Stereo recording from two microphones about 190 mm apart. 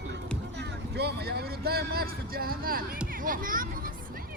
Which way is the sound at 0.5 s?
60° right (ahead or behind).